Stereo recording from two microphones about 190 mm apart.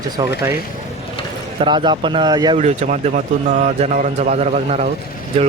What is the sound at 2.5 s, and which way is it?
A man's voice, 35° right (ahead or behind).